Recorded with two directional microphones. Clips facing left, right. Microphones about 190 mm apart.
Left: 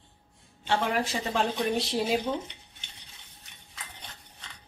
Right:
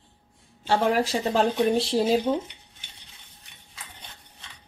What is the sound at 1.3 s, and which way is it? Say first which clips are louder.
Speech: right 6 dB; 30° right (ahead or behind).